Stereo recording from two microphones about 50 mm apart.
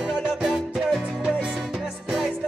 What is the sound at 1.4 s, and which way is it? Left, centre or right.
Music, centre.